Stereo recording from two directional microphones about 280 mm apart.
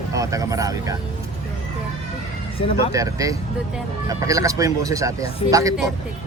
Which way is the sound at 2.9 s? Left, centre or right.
Centre.